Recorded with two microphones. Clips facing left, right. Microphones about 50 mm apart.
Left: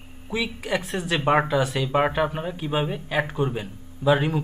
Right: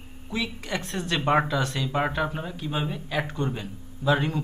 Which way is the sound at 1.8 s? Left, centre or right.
Left.